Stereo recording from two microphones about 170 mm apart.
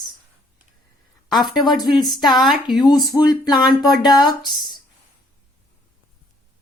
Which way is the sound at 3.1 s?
25° left (ahead or behind).